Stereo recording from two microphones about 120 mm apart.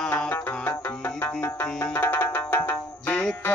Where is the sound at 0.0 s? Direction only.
5° left (ahead or behind).